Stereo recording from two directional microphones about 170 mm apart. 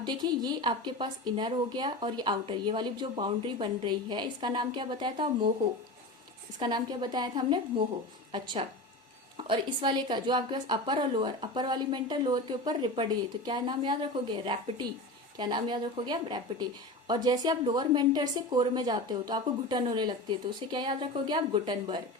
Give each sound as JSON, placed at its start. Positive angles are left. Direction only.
{"t": 0.0, "sound": "a woman's voice", "side_deg": -25}
{"t": 6.6, "sound": "a woman's voice", "side_deg": -25}
{"t": 9.4, "sound": "a woman's voice", "side_deg": -30}